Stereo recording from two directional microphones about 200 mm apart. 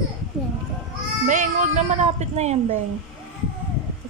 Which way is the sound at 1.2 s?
40° right (ahead or behind).